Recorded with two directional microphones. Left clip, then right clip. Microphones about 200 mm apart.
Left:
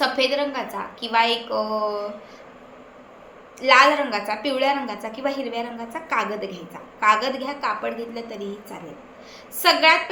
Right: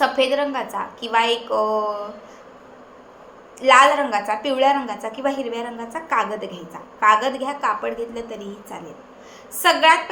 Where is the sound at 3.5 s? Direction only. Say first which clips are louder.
Right 2 dB; 10° right (ahead or behind).